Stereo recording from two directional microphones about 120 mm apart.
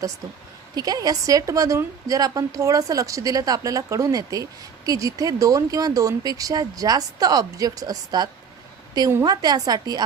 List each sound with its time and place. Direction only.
0.8 s a woman's voice: 30° right (ahead or behind)